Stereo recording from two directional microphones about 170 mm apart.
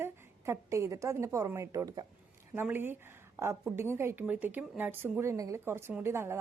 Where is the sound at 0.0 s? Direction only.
15° right (ahead or behind).